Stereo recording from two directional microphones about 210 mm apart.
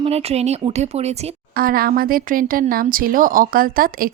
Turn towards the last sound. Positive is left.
turn(degrees=-45)  # may be behind; listen again after turning